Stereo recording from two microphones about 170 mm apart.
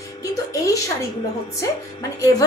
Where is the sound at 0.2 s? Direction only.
20° left (ahead or behind).